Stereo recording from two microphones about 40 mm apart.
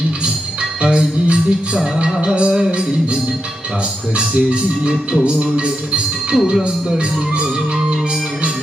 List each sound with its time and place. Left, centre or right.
0.8 s music: right
4.2 s music: right
6.3 s speech: centre